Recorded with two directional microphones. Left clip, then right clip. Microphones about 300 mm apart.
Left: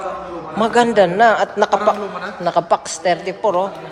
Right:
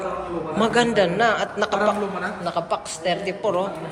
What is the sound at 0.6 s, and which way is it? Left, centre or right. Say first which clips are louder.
A man's voice: left 6 dB; centre.